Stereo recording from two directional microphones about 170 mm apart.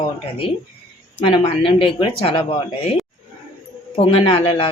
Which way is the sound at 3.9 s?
35° left (ahead or behind).